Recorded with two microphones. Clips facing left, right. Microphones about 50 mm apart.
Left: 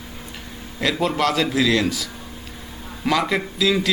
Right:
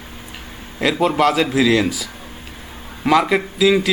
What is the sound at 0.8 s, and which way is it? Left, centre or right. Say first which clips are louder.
A man's voice: right 4 dB; centre.